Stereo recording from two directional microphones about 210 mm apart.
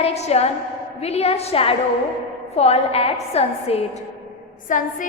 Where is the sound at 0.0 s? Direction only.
30° left (ahead or behind).